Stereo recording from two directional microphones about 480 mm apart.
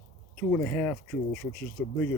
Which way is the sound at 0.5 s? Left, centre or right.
Centre.